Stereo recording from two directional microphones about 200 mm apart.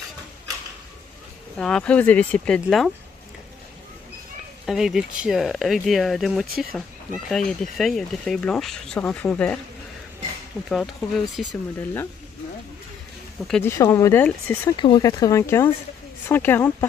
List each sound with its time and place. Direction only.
1.6 s speech: 5° left (ahead or behind)
4.6 s speech: centre (ahead or behind)
10.7 s speech: centre (ahead or behind)
13.5 s speech: 10° left (ahead or behind)
14.8 s speech: 20° left (ahead or behind)